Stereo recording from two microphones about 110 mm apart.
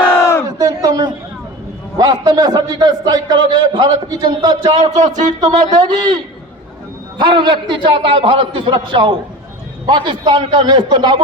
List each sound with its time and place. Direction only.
0.4 s a sound: 35° right (ahead or behind)
2.0 s a man's voice: 40° right (ahead or behind)
4.8 s speech: 90° right
5.7 s a man's voice: 40° right (ahead or behind)
7.2 s a man's voice: 45° right (ahead or behind)